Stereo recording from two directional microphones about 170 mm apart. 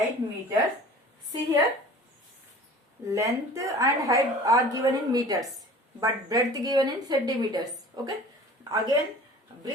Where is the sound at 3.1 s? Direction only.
20° right (ahead or behind).